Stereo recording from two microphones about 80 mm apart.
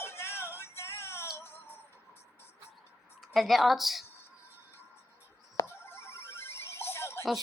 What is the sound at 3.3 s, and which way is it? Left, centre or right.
Speech, centre.